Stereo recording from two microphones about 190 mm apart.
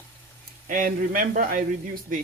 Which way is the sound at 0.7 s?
45° right (ahead or behind).